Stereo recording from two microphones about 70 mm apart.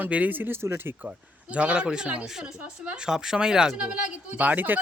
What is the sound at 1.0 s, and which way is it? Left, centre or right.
Speech, centre.